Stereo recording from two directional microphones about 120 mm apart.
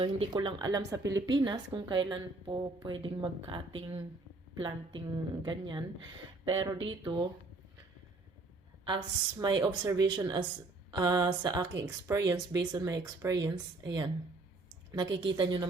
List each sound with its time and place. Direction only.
0.0 s speech: 40° right (ahead or behind)
8.9 s speech: 40° right (ahead or behind)